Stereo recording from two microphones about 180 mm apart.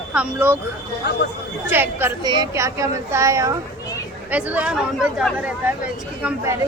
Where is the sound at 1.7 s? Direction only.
10° right (ahead or behind).